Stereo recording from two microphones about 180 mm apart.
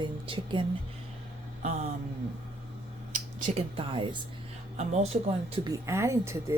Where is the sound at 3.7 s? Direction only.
30° right (ahead or behind).